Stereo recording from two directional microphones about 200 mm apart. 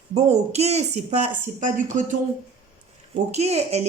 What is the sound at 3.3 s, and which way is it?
Speech, 30° right (ahead or behind).